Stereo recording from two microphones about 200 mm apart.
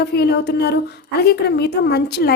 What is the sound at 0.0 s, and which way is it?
A woman's voice, 55° left (ahead or behind).